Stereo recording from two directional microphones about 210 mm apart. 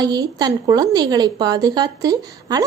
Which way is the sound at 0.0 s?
20° right (ahead or behind).